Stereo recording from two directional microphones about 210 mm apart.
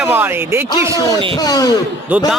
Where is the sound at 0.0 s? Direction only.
10° right (ahead or behind).